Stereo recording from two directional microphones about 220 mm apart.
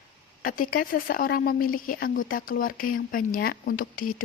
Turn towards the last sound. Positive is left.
turn(degrees=40)  # may be behind; listen again after turning